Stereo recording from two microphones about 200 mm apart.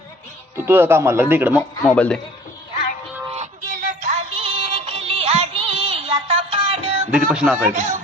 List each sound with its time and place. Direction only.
0.5 s speech: 10° right (ahead or behind)
1.8 s speech: 5° left (ahead or behind)
3.2 s music: 35° right (ahead or behind)
7.1 s speech: 5° right (ahead or behind)
7.7 s speech: 40° right (ahead or behind)